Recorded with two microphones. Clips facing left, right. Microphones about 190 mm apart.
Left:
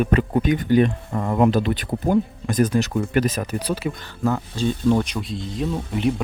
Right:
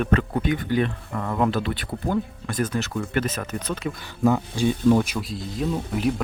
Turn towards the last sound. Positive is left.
turn(degrees=0)  # may be behind; listen again after turning